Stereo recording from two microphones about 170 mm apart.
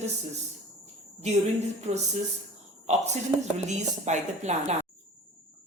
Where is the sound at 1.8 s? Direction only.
40° right (ahead or behind).